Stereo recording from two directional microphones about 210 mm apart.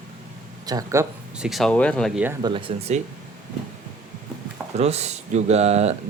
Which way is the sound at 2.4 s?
25° right (ahead or behind).